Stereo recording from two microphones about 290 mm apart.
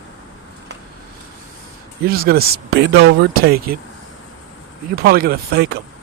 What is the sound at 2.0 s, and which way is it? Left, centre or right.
Speech, right.